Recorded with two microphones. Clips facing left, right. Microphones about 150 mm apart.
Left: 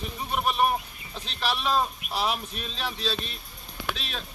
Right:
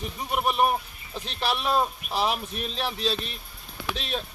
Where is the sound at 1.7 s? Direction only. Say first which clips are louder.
Right 1 dB; 20° right (ahead or behind).